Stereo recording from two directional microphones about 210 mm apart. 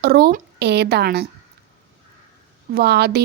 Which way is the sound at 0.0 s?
50° right (ahead or behind).